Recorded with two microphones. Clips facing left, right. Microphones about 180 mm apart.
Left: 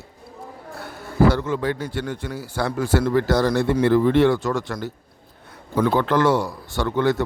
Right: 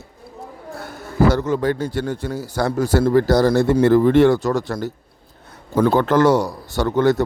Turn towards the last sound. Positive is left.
turn(degrees=-40)  # may be behind; listen again after turning